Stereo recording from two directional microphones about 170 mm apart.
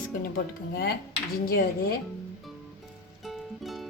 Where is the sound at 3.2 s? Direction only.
Centre (ahead or behind).